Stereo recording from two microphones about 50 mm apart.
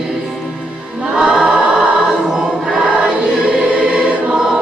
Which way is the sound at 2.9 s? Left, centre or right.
Right.